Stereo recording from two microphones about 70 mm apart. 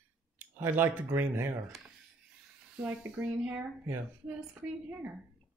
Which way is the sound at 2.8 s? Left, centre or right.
Right.